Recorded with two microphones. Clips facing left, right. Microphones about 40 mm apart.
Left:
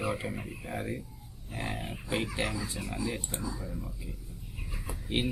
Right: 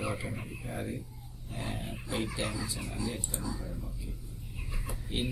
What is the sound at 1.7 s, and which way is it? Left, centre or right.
Speech, left.